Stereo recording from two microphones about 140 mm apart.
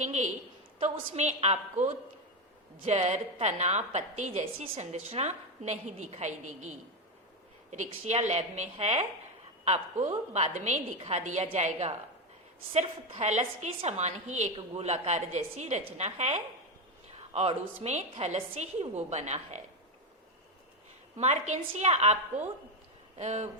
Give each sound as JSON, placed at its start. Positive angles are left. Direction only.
{"t": 0.0, "sound": "a woman's voice", "side_deg": -55}
{"t": 17.1, "sound": "a sound", "side_deg": -50}
{"t": 17.8, "sound": "a woman's voice", "side_deg": -50}
{"t": 21.2, "sound": "a woman's voice", "side_deg": -55}